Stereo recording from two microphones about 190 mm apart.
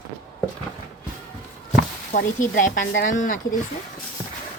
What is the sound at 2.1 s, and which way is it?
A woman's voice, 40° left (ahead or behind).